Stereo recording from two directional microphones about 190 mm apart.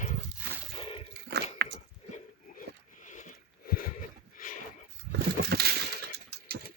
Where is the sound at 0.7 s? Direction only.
30° left (ahead or behind).